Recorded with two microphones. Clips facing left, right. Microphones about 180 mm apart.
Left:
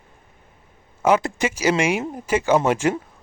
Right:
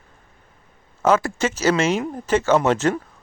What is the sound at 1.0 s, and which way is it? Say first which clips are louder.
Speech: even; 15° left (ahead or behind).